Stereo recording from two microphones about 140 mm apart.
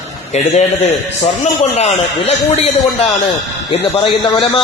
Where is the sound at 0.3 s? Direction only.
55° left (ahead or behind).